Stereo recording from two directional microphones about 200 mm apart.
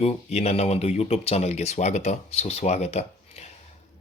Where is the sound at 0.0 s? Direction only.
30° left (ahead or behind).